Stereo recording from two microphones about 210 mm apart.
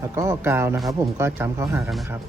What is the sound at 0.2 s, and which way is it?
Speech, 15° right (ahead or behind).